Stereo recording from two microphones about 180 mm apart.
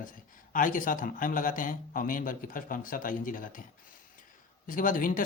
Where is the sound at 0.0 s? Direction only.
50° left (ahead or behind).